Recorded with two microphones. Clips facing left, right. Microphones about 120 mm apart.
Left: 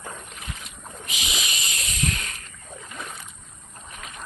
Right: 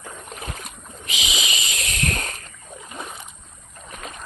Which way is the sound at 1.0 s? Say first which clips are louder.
Right 4 dB; 90° right.